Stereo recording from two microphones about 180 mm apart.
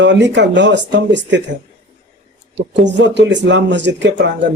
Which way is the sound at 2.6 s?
75° right (ahead or behind).